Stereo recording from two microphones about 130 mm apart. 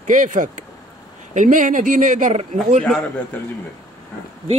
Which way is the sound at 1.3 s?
75° right (ahead or behind).